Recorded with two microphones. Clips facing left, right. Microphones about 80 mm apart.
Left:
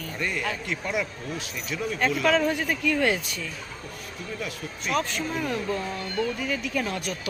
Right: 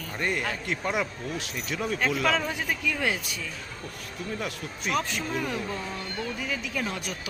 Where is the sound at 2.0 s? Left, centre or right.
Centre.